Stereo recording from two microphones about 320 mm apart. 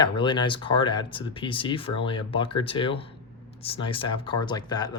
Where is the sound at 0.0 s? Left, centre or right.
Centre.